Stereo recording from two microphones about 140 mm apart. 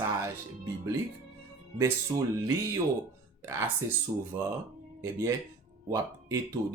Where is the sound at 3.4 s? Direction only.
20° right (ahead or behind).